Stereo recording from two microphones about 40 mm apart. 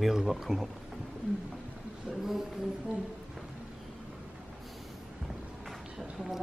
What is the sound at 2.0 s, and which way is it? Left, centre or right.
Speech, centre.